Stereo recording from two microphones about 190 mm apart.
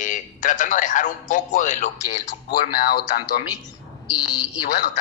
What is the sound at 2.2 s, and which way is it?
Speech, 55° left (ahead or behind).